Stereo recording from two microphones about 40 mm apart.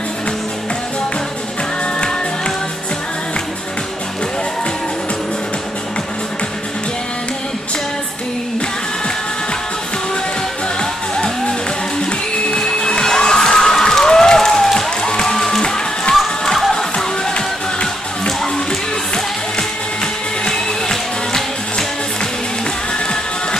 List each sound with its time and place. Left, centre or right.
10.8 s music: left
12.1 s cheering: left
15.0 s music: centre